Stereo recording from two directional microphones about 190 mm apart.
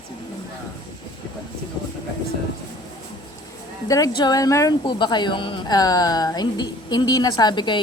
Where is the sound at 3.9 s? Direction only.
20° left (ahead or behind).